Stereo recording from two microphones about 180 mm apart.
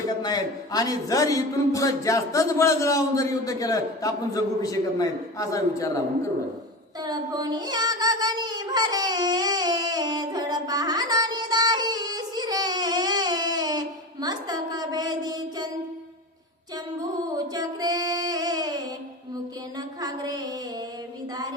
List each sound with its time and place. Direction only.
0.2 s a man's voice: 20° left (ahead or behind)
7.0 s child singing: 20° right (ahead or behind)
17.3 s female singing: 20° right (ahead or behind)
20.0 s a woman's voice: 20° right (ahead or behind)